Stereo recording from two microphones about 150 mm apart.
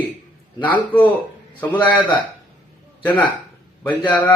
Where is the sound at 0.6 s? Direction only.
10° left (ahead or behind).